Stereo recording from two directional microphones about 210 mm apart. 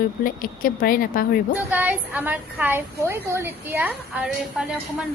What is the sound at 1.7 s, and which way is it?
A woman's voice, 10° right (ahead or behind).